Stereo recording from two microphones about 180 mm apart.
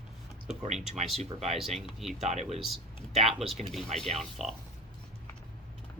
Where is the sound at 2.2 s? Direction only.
40° right (ahead or behind).